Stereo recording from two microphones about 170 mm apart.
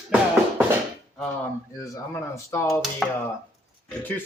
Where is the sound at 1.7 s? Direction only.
20° left (ahead or behind).